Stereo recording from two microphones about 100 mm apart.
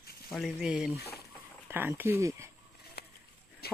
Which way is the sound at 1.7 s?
20° right (ahead or behind).